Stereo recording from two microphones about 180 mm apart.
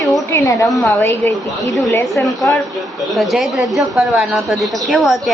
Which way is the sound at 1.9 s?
10° left (ahead or behind).